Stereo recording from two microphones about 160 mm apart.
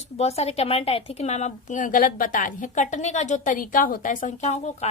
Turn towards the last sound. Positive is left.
turn(degrees=45)  # may be behind; listen again after turning